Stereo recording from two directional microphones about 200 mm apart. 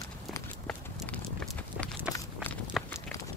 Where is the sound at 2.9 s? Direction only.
15° left (ahead or behind).